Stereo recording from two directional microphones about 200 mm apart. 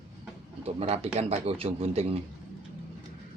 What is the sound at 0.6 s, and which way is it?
Speech, 30° right (ahead or behind).